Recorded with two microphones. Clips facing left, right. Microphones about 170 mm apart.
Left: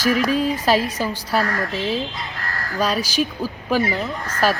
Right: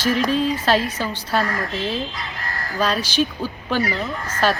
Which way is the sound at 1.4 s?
20° right (ahead or behind).